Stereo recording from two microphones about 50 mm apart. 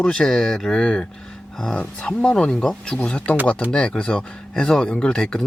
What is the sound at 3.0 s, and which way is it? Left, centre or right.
Speech, left.